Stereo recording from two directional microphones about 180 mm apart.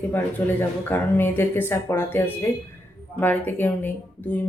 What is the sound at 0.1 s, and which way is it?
Speech, 10° left (ahead or behind).